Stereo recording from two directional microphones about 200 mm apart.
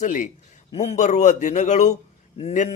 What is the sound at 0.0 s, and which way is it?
Speech, 40° left (ahead or behind).